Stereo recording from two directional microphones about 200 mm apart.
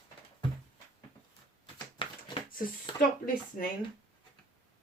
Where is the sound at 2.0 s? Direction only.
25° left (ahead or behind).